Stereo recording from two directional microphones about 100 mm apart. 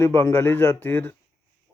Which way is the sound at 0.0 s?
25° left (ahead or behind).